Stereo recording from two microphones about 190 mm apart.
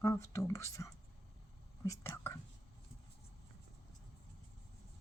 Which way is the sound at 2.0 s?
10° left (ahead or behind).